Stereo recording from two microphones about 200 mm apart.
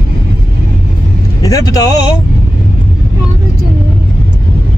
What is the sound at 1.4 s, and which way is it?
Speech, 15° left (ahead or behind).